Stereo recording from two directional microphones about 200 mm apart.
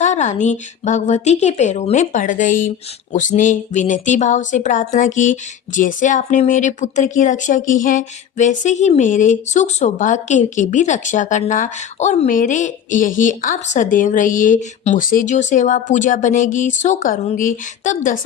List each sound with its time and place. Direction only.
0.0 s speech: 35° left (ahead or behind)